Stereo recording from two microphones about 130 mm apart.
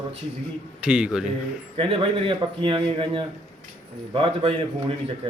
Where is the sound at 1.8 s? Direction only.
45° right (ahead or behind).